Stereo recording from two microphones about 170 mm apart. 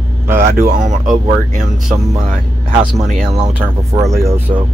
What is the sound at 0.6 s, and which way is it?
Speech, 50° right (ahead or behind).